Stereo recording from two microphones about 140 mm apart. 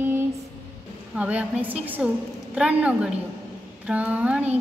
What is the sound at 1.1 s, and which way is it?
Child singing, 10° right (ahead or behind).